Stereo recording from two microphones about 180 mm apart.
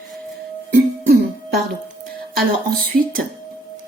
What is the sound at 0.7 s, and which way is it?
Music, 60° right (ahead or behind).